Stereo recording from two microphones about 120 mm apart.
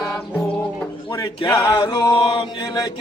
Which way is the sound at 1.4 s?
35° left (ahead or behind).